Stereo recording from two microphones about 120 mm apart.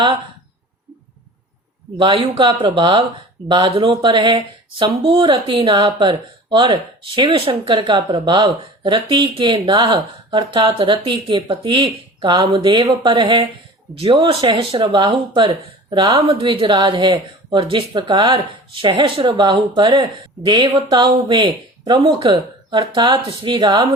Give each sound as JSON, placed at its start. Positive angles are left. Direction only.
{"t": 2.0, "sound": "speech", "side_deg": -45}
{"t": 7.9, "sound": "speech", "side_deg": -40}